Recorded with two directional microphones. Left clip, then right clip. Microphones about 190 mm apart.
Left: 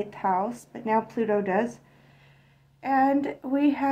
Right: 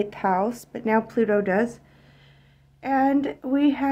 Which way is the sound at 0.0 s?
35° right (ahead or behind).